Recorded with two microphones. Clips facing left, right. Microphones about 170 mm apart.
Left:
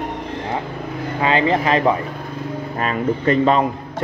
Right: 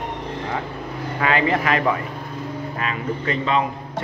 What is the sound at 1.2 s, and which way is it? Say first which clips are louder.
Speech: left 3 dB; 25° left (ahead or behind).